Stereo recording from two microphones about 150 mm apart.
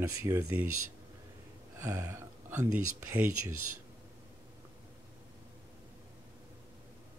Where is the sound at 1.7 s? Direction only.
20° right (ahead or behind).